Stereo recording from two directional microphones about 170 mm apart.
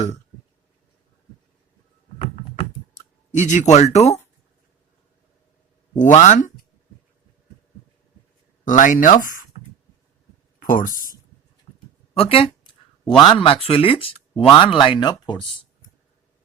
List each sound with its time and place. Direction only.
2.1 s computer keyboard: 35° left (ahead or behind)
6.0 s speech: 45° left (ahead or behind)
8.6 s speech: 50° left (ahead or behind)
10.6 s speech: 55° left (ahead or behind)
12.1 s speech: 35° left (ahead or behind)